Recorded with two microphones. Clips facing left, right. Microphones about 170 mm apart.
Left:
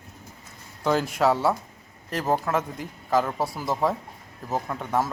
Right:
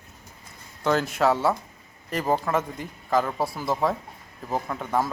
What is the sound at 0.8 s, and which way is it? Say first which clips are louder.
A man's voice: even; 5° left (ahead or behind).